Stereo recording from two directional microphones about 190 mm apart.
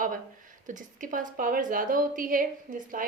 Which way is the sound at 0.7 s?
45° right (ahead or behind).